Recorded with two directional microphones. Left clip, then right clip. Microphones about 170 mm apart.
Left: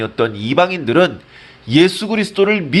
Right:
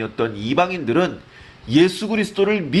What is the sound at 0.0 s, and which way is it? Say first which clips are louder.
Speech: left 5 dB; 25° left (ahead or behind).